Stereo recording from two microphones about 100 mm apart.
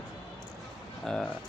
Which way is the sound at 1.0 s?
5° left (ahead or behind).